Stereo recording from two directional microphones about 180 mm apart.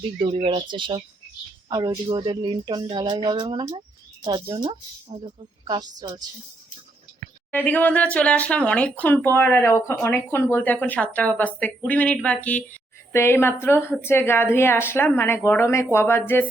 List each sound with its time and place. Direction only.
0.2 s speech: 30° right (ahead or behind)
7.5 s speech: 10° left (ahead or behind)